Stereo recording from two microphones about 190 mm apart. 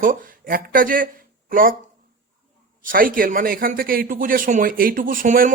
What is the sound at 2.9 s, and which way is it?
A man's voice, 50° right (ahead or behind).